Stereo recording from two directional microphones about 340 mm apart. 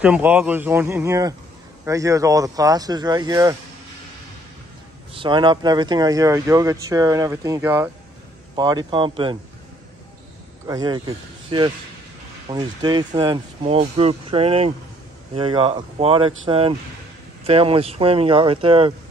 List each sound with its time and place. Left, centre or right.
0.0 s a man's voice: centre
5.1 s speech: centre
10.7 s speech: centre